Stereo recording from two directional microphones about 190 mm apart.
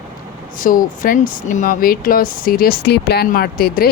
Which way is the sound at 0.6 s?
45° left (ahead or behind).